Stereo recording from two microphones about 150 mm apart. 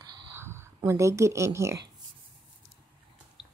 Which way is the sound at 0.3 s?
15° right (ahead or behind).